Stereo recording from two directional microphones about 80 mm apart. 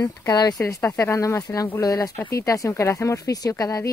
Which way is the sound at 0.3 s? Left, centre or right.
Left.